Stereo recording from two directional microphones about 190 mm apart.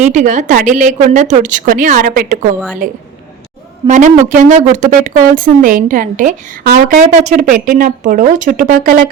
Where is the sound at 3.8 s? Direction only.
40° right (ahead or behind).